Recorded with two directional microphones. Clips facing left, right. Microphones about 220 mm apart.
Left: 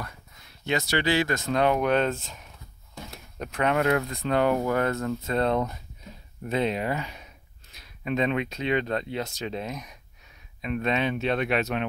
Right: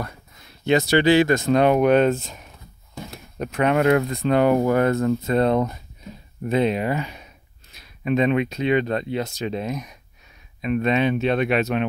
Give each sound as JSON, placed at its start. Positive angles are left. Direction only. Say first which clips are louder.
{"t": 0.7, "sound": "speech", "louder": "right 9 dB", "side_deg": -25}